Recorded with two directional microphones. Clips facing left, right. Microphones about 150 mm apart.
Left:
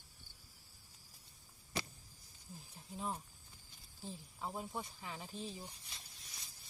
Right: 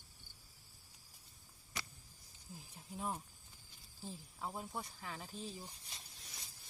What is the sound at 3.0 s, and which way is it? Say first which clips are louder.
Speech: even; 10° right (ahead or behind).